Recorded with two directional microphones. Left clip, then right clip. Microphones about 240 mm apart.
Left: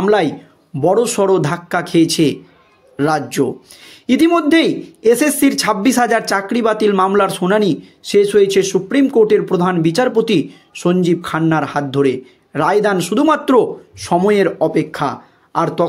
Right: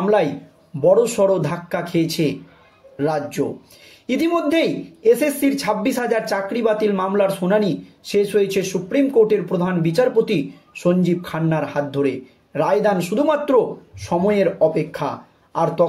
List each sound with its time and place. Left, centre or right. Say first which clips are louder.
0.0 s a man's voice: left 3 dB; left